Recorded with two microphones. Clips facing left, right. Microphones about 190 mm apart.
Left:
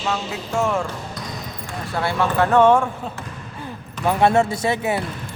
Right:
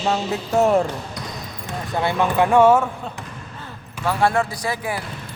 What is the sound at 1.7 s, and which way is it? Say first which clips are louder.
Speech: right 2 dB; 20° right (ahead or behind).